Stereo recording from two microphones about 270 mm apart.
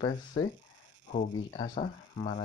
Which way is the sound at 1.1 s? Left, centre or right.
Left.